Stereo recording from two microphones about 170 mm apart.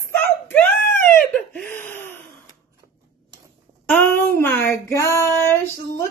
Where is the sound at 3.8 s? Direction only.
10° left (ahead or behind).